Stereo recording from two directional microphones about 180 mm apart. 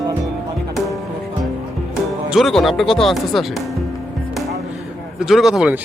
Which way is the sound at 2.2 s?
Centre (ahead or behind).